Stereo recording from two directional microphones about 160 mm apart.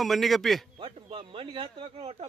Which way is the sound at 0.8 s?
35° right (ahead or behind).